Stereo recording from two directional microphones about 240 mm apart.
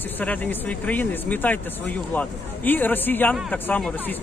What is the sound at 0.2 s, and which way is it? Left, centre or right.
Speech, centre.